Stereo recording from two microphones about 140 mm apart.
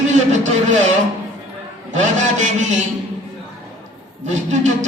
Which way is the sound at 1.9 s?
60° right (ahead or behind).